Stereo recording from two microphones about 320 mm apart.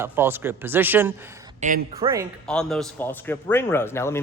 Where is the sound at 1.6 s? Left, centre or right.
Right.